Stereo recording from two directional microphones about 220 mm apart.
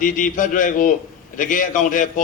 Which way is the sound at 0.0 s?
35° left (ahead or behind).